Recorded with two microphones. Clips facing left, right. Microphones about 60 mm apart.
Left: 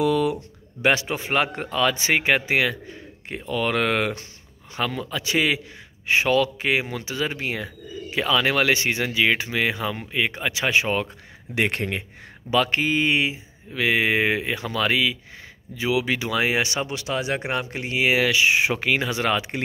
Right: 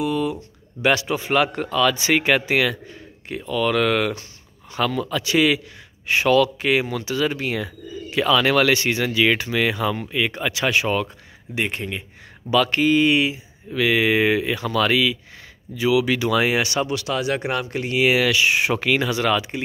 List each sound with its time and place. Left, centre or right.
0.1 s a sound: left
0.8 s speech: left
3.3 s speech: left
4.7 s speech: left
11.5 s speech: left
12.4 s speech: left